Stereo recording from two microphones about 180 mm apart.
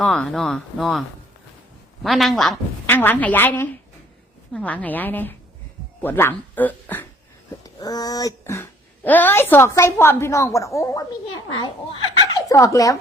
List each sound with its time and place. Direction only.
0.0 s speech: centre (ahead or behind)
2.0 s speech: centre (ahead or behind)
7.6 s a child's voice: 20° left (ahead or behind)